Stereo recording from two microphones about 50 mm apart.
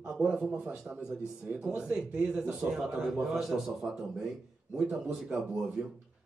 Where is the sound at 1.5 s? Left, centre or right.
Right.